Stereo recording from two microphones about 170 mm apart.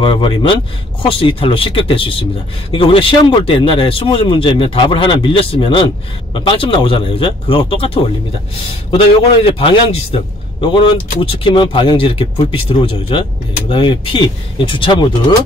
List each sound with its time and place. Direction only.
0.0 s a man's voice: 30° left (ahead or behind)